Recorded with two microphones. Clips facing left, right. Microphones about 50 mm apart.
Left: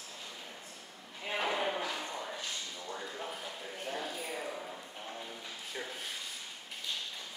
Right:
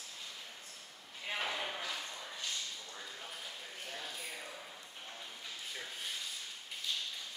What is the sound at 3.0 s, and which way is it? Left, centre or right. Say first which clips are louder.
Clip-clop: left 6 dB; left.